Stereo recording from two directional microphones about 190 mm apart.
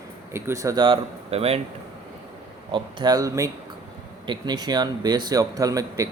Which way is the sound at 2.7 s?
25° right (ahead or behind).